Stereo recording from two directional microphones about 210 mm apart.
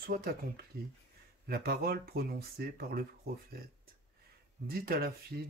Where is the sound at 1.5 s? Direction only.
50° right (ahead or behind).